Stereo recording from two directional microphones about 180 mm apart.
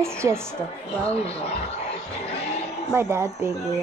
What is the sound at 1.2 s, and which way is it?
Speech, 35° left (ahead or behind).